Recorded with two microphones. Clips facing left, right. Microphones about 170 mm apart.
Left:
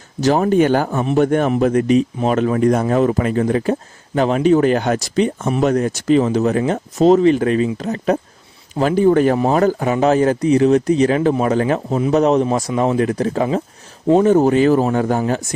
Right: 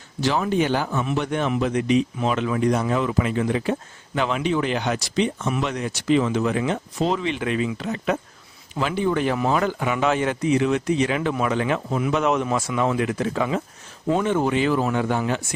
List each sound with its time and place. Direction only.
0.2 s speech: 45° left (ahead or behind)